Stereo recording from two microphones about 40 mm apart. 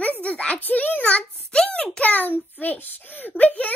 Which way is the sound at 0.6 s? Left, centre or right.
Left.